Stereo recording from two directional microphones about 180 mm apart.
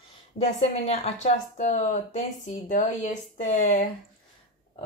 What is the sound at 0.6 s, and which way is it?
Speech, 35° left (ahead or behind).